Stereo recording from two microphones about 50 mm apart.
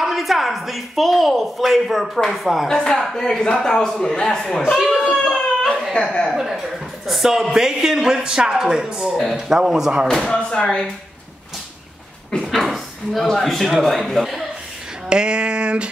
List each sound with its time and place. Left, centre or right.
0.0 s a woman's voice: centre
2.7 s a man's voice: centre
4.6 s a man's voice: centre
5.2 s a sound: centre
7.1 s a woman's voice: centre
9.1 s a woman's voice: centre
10.0 s a man's voice: centre
10.3 s speech: left
12.4 s speech: centre
15.0 s a sound: centre